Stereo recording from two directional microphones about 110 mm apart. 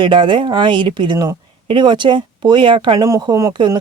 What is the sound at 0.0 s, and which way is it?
Speech, 45° right (ahead or behind).